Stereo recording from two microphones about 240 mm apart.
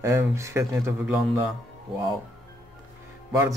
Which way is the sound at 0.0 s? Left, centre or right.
Centre.